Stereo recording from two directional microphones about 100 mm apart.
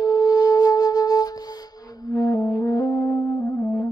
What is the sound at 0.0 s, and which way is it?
Flute, 45° left (ahead or behind).